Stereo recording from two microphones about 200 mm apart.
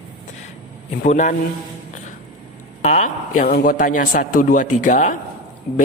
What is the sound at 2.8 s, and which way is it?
A man's voice, 35° left (ahead or behind).